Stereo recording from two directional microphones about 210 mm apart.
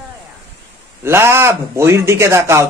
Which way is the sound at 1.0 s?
10° right (ahead or behind).